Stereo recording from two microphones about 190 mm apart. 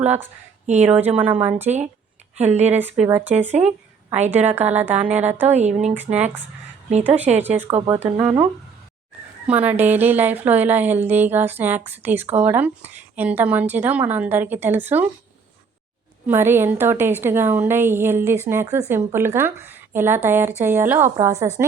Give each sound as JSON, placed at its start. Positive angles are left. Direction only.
{"t": 0.0, "sound": "a woman's voice", "side_deg": -10}
{"t": 1.6, "sound": "speech", "side_deg": -35}
{"t": 2.6, "sound": "a woman's voice", "side_deg": -10}
{"t": 5.5, "sound": "speech", "side_deg": -35}
{"t": 5.9, "sound": "a woman's voice", "side_deg": -10}
{"t": 7.4, "sound": "a woman's voice", "side_deg": -10}
{"t": 9.5, "sound": "a woman's voice", "side_deg": -10}
{"t": 16.2, "sound": "a woman's voice", "side_deg": -10}